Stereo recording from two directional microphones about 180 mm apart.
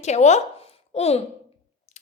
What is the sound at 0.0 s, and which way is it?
A woman's voice, 40° left (ahead or behind).